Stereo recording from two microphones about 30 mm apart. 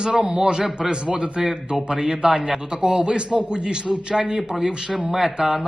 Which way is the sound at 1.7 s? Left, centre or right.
Right.